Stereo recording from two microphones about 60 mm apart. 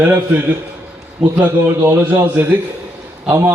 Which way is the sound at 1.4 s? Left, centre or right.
Right.